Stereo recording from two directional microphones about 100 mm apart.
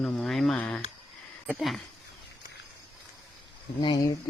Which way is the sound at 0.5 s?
20° left (ahead or behind).